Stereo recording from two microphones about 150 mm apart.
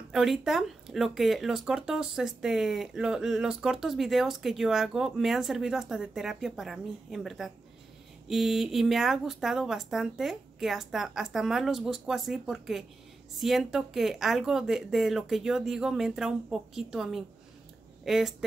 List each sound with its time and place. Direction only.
0.1 s speech: 5° right (ahead or behind)